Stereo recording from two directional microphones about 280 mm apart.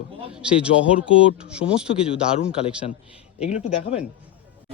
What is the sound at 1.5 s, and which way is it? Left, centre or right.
Speech, centre.